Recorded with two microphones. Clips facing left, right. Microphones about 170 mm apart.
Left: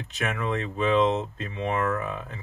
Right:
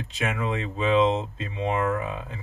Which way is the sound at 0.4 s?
10° right (ahead or behind).